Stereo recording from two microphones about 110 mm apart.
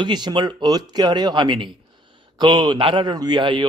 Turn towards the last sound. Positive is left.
turn(degrees=-45)  # may be behind; listen again after turning